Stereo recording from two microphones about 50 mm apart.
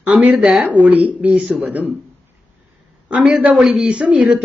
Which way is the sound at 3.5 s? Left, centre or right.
Centre.